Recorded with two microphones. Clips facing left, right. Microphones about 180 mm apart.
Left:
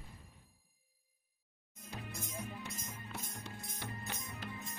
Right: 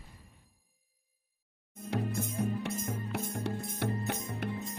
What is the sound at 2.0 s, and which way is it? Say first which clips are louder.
Music: right 12 dB; 55° right (ahead or behind).